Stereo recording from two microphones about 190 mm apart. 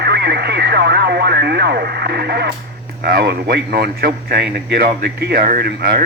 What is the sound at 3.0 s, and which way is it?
Speech, 55° right (ahead or behind).